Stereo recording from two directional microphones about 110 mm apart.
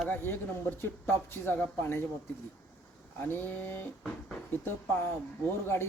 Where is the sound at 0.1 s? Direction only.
20° left (ahead or behind).